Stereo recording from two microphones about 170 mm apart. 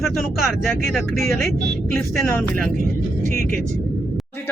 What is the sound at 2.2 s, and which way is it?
Speech, 10° left (ahead or behind).